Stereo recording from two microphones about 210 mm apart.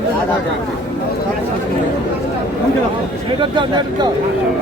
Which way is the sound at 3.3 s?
20° right (ahead or behind).